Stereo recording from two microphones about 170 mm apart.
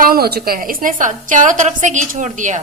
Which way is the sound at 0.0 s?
65° right (ahead or behind).